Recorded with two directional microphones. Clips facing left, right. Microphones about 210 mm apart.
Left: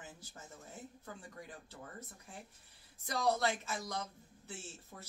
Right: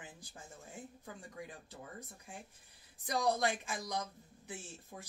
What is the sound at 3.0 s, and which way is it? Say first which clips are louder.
Speech: even; 15° right (ahead or behind).